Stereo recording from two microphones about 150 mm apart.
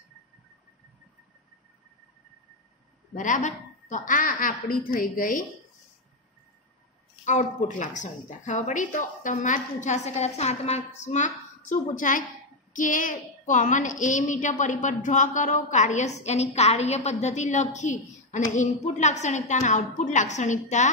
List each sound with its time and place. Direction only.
3.2 s a woman's voice: 55° left (ahead or behind)
7.2 s a woman's voice: 55° left (ahead or behind)